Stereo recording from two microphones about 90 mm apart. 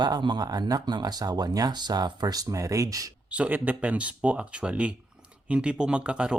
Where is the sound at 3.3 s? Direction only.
15° right (ahead or behind).